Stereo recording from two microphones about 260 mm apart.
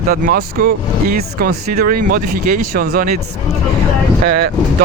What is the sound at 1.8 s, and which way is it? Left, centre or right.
Speech, right.